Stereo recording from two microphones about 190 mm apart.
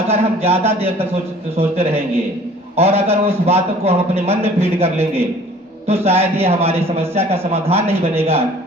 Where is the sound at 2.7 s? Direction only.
30° right (ahead or behind).